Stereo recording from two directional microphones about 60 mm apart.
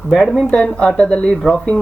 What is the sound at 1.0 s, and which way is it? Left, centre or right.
Speech, centre.